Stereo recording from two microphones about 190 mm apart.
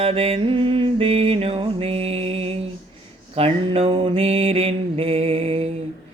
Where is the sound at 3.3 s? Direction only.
30° right (ahead or behind).